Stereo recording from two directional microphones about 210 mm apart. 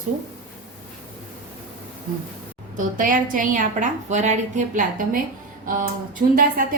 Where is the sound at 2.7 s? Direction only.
40° right (ahead or behind).